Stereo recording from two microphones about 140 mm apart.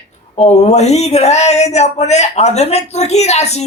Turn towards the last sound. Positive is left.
turn(degrees=50)  # may be behind; listen again after turning